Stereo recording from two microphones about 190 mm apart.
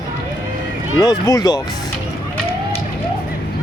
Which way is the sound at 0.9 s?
20° left (ahead or behind).